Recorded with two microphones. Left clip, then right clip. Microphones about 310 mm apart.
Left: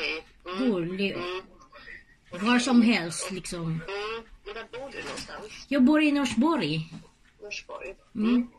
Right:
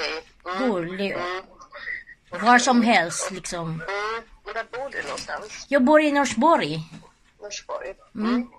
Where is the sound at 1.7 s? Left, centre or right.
Centre.